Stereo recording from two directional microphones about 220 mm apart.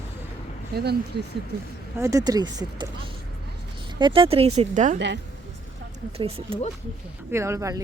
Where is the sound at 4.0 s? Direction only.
20° right (ahead or behind).